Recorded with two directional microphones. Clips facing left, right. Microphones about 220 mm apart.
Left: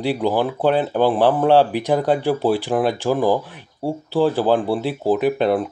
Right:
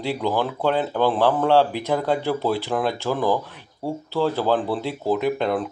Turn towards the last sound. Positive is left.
turn(degrees=15)  # may be behind; listen again after turning